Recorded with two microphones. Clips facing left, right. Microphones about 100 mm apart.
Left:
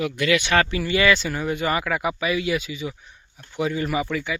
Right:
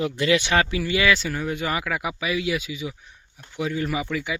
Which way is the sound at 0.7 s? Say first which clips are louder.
Left 2 dB; 5° right (ahead or behind).